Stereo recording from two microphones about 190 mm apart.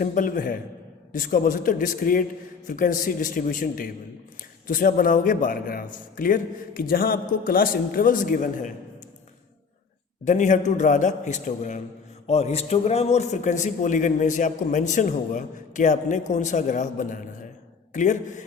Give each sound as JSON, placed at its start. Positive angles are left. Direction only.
{"t": 0.0, "sound": "a man's voice", "side_deg": 45}
{"t": 10.2, "sound": "a man's voice", "side_deg": 40}